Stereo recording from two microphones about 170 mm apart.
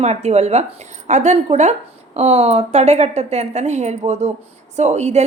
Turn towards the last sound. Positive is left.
turn(degrees=-40)  # may be behind; listen again after turning